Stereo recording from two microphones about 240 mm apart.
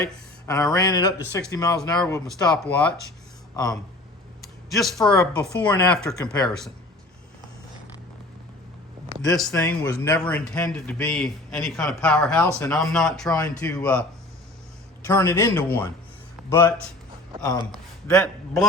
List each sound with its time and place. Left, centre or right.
0.4 s a man's voice: centre
4.4 s a sound: centre
4.9 s a man's voice: centre
9.5 s a man's voice: centre
13.2 s a man's voice: centre
15.0 s a man's voice: centre
18.1 s a man's voice: centre